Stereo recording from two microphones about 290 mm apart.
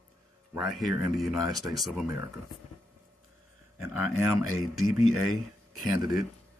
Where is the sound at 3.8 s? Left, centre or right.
Centre.